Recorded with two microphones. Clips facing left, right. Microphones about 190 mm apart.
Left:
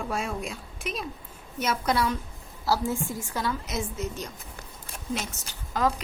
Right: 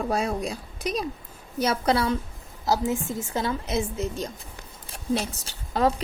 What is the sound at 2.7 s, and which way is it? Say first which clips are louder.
A woman's voice: right 2 dB; 20° right (ahead or behind).